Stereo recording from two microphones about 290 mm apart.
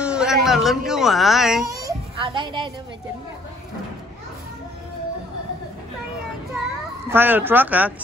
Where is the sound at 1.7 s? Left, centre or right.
Centre.